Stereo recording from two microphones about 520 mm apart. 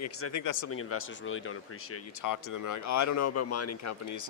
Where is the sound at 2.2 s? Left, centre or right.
Left.